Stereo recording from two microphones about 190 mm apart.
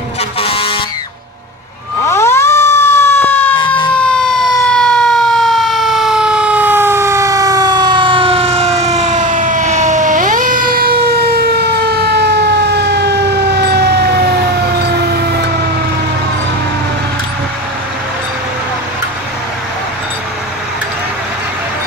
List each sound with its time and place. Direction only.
0.4 s vehicle: 30° left (ahead or behind)
2.0 s emergency vehicle: 15° left (ahead or behind)
3.5 s emergency vehicle: 25° left (ahead or behind)
3.9 s siren: 5° left (ahead or behind); by 15.3 s 60° right (ahead or behind)